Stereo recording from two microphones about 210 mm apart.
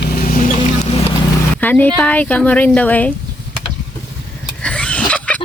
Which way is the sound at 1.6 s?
10° left (ahead or behind).